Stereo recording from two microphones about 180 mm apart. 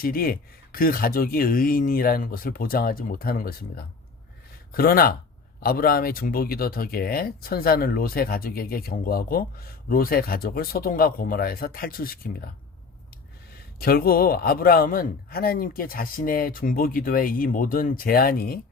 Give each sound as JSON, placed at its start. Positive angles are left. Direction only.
{"t": 0.0, "sound": "a man's voice", "side_deg": 55}
{"t": 13.7, "sound": "a man's voice", "side_deg": 55}